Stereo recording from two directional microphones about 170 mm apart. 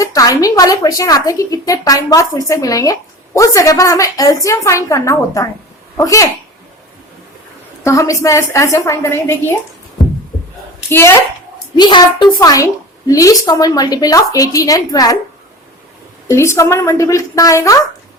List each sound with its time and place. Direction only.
0.0 s a woman's voice: 20° left (ahead or behind)
7.9 s a woman's voice: 20° left (ahead or behind)
10.8 s a woman's voice: 15° left (ahead or behind)
11.8 s a woman's voice: 25° left (ahead or behind)
16.3 s a woman's voice: 15° left (ahead or behind)